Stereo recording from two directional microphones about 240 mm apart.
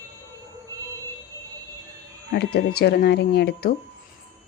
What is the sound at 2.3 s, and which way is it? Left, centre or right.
Speech, left.